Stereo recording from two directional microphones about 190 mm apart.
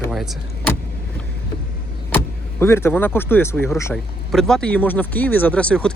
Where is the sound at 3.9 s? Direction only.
Centre (ahead or behind).